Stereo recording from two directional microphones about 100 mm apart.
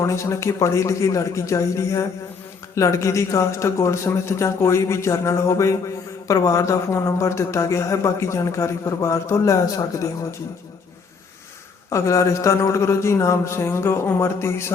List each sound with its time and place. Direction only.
0.0 s speech: 30° left (ahead or behind)
11.9 s a man's voice: 30° left (ahead or behind)